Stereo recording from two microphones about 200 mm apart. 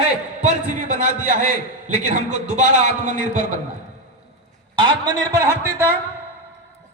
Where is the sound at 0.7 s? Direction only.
40° right (ahead or behind).